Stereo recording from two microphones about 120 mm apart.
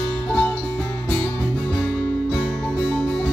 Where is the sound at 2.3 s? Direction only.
5° left (ahead or behind).